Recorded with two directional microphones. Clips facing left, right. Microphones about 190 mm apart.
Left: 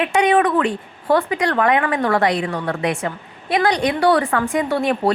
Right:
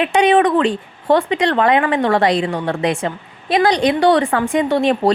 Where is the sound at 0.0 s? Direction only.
30° right (ahead or behind).